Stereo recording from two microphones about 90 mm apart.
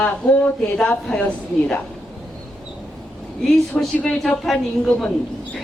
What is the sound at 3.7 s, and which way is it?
A woman's voice, 5° left (ahead or behind).